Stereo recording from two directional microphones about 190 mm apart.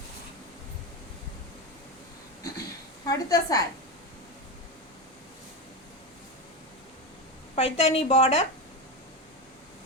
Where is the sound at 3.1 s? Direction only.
20° left (ahead or behind).